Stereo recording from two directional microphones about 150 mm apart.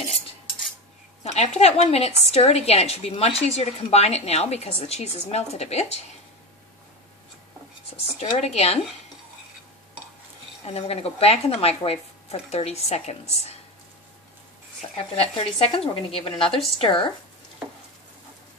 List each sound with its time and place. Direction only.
1.2 s a woman's voice: 45° left (ahead or behind)
8.4 s a woman's voice: 45° left (ahead or behind)
10.7 s a woman's voice: 40° left (ahead or behind)
15.0 s a woman's voice: 40° left (ahead or behind)